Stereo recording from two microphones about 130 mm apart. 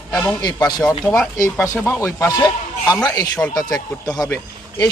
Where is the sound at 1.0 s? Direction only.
10° left (ahead or behind).